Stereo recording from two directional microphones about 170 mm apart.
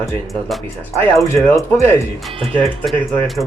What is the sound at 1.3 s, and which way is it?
Speech, 15° left (ahead or behind).